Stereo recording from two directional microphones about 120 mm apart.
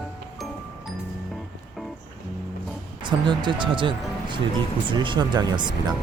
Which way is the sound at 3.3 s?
40° right (ahead or behind).